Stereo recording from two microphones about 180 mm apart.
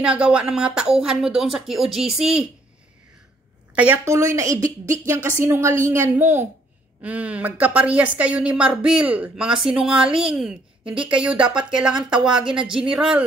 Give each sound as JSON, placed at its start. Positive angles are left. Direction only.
{"t": 0.0, "sound": "a woman's voice", "side_deg": -5}
{"t": 3.7, "sound": "a woman's voice", "side_deg": -10}